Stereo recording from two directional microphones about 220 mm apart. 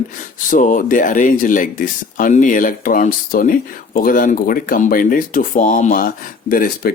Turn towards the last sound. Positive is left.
turn(degrees=40)  # may be behind; listen again after turning